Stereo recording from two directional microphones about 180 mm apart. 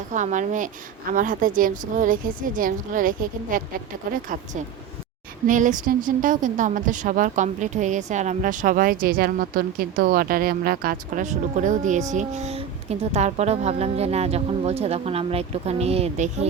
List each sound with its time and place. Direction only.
0.1 s speech: 45° right (ahead or behind)
5.5 s speech: 45° right (ahead or behind)